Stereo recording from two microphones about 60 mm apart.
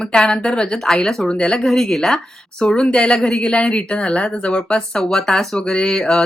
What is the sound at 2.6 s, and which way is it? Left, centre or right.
Speech, centre.